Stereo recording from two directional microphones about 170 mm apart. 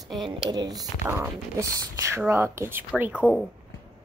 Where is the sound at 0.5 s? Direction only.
25° right (ahead or behind).